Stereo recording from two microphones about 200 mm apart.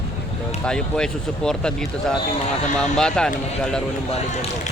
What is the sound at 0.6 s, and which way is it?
Speech, 5° left (ahead or behind).